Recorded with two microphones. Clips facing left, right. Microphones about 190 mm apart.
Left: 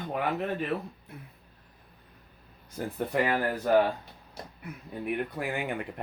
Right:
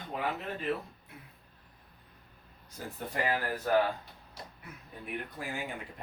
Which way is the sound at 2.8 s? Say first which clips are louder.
Left 8 dB; 60° left (ahead or behind).